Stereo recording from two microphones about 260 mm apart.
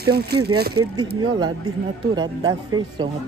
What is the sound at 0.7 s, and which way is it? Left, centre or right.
Speech, centre.